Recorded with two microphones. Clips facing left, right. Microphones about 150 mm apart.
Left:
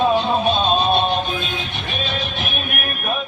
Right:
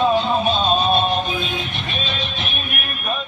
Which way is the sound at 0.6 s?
5° left (ahead or behind).